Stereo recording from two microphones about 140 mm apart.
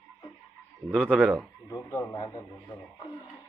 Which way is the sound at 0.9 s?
5° left (ahead or behind).